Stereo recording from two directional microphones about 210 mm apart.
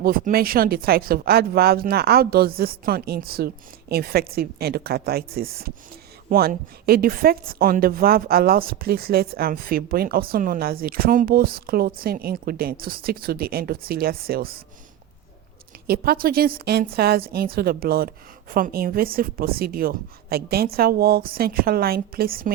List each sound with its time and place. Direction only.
0.0 s a woman's voice: 45° right (ahead or behind)
15.9 s a woman's voice: 45° right (ahead or behind)